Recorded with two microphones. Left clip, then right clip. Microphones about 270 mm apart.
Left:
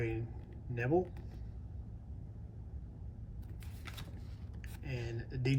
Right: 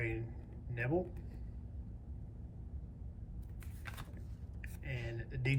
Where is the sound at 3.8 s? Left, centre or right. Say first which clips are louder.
Even; centre.